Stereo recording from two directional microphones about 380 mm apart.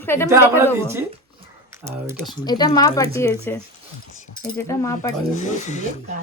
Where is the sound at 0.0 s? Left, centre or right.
Centre.